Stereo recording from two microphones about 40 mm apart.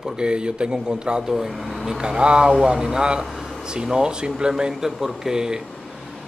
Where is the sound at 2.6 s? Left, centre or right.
Centre.